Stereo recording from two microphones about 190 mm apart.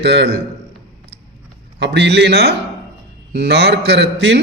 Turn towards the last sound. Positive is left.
turn(degrees=-65)  # may be behind; listen again after turning